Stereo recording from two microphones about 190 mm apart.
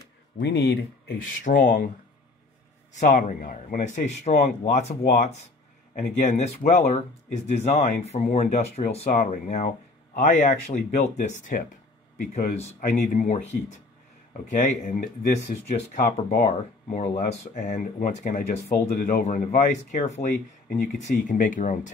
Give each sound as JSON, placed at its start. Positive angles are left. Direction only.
{"t": 0.4, "sound": "speech", "side_deg": 60}
{"t": 2.9, "sound": "speech", "side_deg": 45}
{"t": 9.1, "sound": "speech", "side_deg": 45}